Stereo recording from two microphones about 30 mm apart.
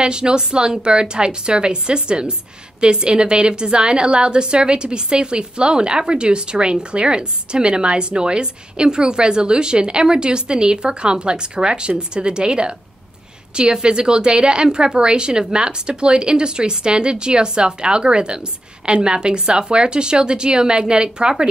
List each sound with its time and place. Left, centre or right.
0.0 s a woman's voice: right